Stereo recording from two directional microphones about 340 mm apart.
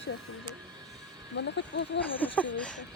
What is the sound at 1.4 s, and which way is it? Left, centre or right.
Speech, left.